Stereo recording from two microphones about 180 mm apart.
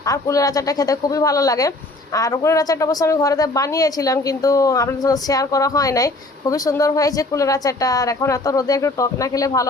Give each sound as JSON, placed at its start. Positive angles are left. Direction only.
{"t": 0.0, "sound": "a woman's voice", "side_deg": 20}